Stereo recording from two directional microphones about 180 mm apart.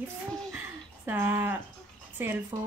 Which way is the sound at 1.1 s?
10° right (ahead or behind).